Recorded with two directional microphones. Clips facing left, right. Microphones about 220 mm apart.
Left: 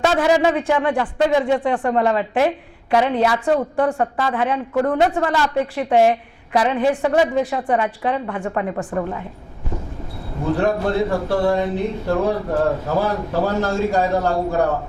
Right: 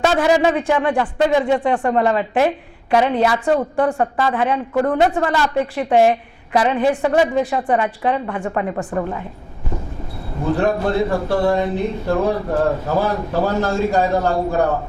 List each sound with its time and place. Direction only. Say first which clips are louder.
0.0 s speech: right 1 dB; 20° right (ahead or behind)
6.5 s speech: right 1 dB; 20° right (ahead or behind)
10.4 s speech: right 1 dB; 25° right (ahead or behind)